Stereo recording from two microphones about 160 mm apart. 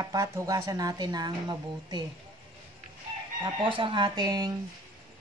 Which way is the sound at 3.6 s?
30° right (ahead or behind).